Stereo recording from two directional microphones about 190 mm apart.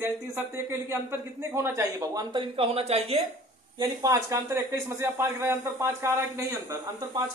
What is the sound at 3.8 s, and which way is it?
Speech, 15° right (ahead or behind).